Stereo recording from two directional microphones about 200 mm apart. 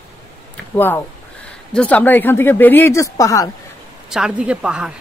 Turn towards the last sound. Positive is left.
turn(degrees=-5)  # may be behind; listen again after turning